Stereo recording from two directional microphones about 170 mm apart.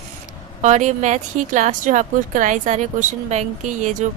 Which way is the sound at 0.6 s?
45° right (ahead or behind).